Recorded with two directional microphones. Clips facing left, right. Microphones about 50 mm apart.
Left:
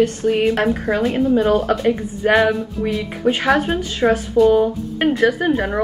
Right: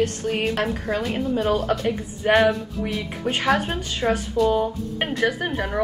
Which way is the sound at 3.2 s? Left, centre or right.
Centre.